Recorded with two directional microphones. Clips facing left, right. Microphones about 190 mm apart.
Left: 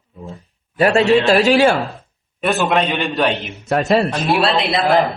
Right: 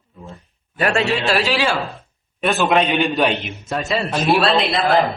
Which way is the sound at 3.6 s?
65° left (ahead or behind).